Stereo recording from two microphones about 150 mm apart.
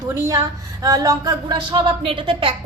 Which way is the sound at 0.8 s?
25° right (ahead or behind).